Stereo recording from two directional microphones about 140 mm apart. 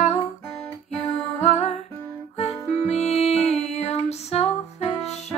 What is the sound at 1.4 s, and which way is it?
Music, 50° left (ahead or behind).